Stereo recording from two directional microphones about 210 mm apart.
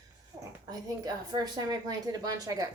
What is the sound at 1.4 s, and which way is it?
A woman's voice, 20° right (ahead or behind).